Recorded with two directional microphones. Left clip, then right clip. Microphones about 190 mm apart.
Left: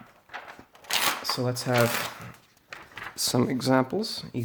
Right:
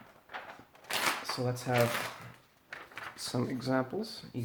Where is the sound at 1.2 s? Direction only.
50° left (ahead or behind).